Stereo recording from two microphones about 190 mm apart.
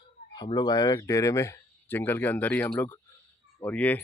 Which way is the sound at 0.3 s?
20° left (ahead or behind).